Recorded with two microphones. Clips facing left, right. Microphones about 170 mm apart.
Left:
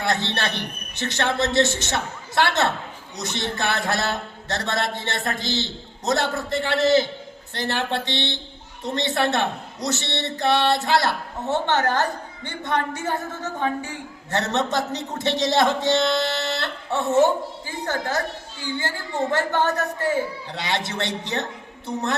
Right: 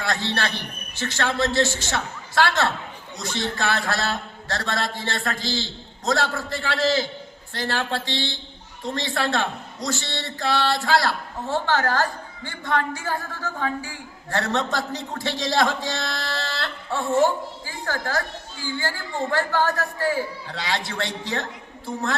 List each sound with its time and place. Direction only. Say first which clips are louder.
0.0 s a woman's voice: left 1 dB; 20° left (ahead or behind)